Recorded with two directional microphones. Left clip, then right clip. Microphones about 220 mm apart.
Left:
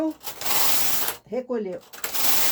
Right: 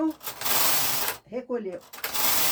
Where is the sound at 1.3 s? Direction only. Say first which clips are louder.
Left 8 dB; 40° left (ahead or behind).